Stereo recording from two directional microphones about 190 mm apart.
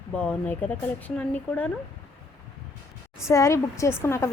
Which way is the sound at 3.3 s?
15° left (ahead or behind).